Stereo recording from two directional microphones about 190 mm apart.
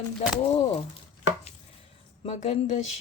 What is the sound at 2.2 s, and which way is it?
Speech, 35° left (ahead or behind).